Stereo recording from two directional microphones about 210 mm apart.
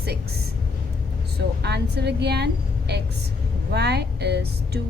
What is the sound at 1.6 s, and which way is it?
A woman's voice, 50° right (ahead or behind).